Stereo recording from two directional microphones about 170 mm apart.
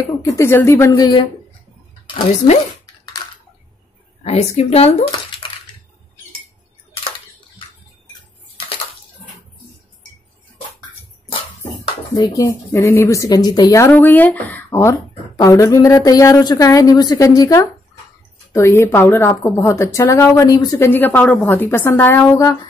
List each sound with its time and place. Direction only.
0.2 s a woman's voice: 20° left (ahead or behind)
4.2 s a woman's voice: 40° left (ahead or behind)
12.2 s a woman's voice: 20° left (ahead or behind)